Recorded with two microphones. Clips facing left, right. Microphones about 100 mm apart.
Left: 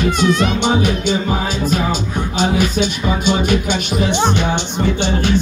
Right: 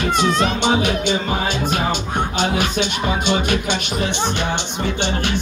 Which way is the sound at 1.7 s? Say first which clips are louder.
Left 2 dB; 55° right (ahead or behind).